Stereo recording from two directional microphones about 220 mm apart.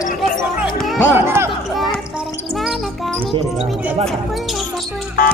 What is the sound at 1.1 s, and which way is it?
Speech, 10° right (ahead or behind).